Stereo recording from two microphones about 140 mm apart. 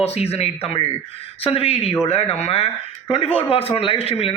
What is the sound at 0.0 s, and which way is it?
A man's voice, 50° left (ahead or behind).